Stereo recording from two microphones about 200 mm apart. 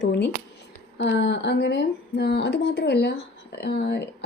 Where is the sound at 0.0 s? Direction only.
60° left (ahead or behind).